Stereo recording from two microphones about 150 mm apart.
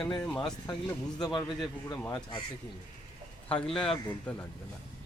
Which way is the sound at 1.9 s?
10° left (ahead or behind).